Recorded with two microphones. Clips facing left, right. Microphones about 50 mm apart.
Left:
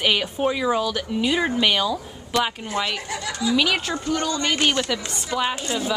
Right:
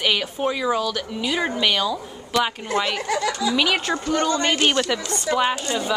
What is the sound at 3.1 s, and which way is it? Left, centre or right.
Speech, right.